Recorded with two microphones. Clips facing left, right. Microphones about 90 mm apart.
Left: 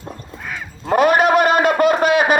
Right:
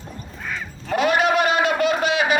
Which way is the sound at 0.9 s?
45° left (ahead or behind).